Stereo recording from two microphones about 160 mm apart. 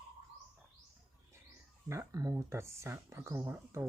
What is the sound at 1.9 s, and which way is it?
Speech, 20° right (ahead or behind).